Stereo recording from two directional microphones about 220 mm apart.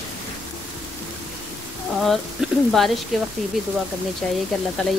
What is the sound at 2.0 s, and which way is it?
Speech, centre (ahead or behind).